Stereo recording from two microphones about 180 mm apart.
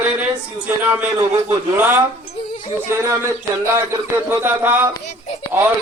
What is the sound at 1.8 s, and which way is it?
Speech, 10° right (ahead or behind).